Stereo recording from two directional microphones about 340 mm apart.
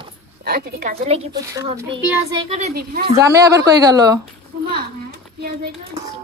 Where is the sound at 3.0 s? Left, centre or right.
Centre.